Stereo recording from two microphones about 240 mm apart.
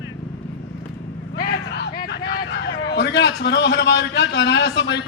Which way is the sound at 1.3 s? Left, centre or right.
Left.